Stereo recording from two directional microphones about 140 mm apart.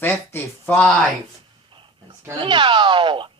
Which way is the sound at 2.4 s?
35° right (ahead or behind).